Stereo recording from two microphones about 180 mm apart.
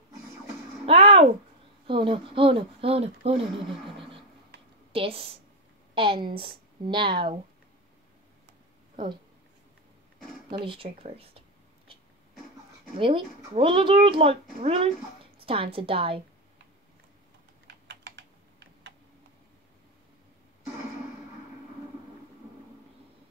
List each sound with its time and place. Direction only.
0.8 s a sound: 30° right (ahead or behind)
1.9 s speech: 30° right (ahead or behind)
4.9 s speech: 30° right (ahead or behind)
8.9 s speech: 25° right (ahead or behind)
10.6 s speech: 30° right (ahead or behind)
13.0 s speech: 30° right (ahead or behind)
17.6 s typing: 75° right (ahead or behind)